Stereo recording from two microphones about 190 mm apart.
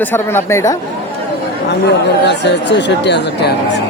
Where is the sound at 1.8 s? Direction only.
65° left (ahead or behind).